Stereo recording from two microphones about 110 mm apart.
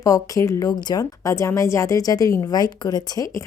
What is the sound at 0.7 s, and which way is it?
A woman's voice, 40° left (ahead or behind).